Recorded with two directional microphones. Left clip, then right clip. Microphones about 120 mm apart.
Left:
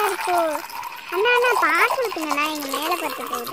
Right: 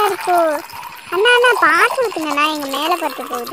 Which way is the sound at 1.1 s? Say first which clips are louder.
Right 6 dB; 45° right (ahead or behind).